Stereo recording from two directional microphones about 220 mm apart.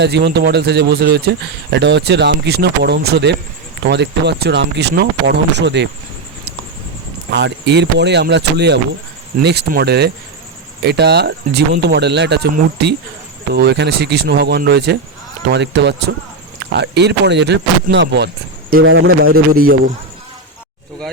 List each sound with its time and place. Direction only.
0.0 s speech: 50° right (ahead or behind)
7.3 s speech: 50° right (ahead or behind)
18.8 s speech: 65° right (ahead or behind)
19.2 s a man's voice: 40° right (ahead or behind)